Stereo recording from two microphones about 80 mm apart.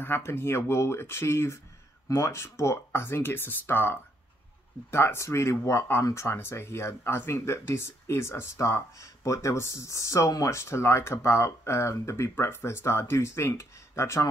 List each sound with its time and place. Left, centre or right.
0.0 s speech: left